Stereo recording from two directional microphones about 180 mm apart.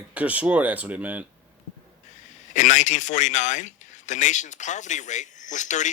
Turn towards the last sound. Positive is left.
turn(degrees=40)  # may be behind; listen again after turning